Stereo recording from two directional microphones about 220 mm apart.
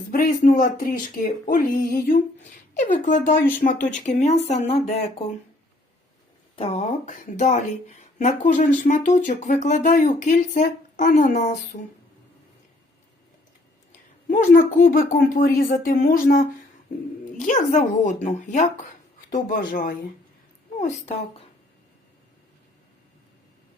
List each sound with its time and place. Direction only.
0.1 s speech: 40° left (ahead or behind)
6.6 s speech: 30° left (ahead or behind)
14.3 s speech: 40° left (ahead or behind)
20.7 s speech: 30° left (ahead or behind)